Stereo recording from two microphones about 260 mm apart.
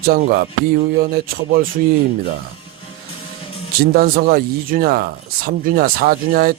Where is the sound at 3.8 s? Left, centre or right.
Right.